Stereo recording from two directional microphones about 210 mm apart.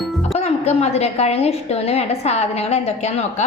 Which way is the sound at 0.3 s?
30° left (ahead or behind).